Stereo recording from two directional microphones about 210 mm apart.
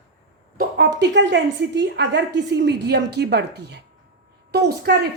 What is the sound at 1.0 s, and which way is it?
A woman's voice, 55° right (ahead or behind).